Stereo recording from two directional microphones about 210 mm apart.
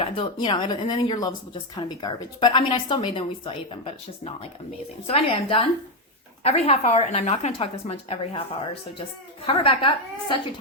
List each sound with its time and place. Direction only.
0.0 s speech: 20° left (ahead or behind)
9.5 s speech: 25° left (ahead or behind)